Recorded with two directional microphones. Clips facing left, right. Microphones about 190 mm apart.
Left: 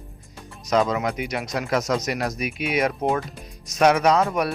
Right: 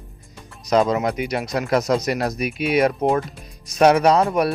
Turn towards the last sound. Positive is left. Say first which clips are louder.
# right 3 dB
turn(degrees=-30)  # may be behind; listen again after turning